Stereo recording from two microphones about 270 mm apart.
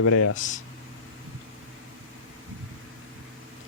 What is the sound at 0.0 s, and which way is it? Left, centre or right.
Speech, left.